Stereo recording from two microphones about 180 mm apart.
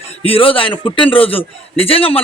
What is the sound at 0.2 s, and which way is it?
A man's voice, 30° left (ahead or behind).